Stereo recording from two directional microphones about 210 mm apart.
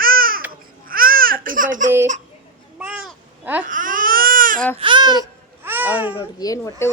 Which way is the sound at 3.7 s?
40° right (ahead or behind).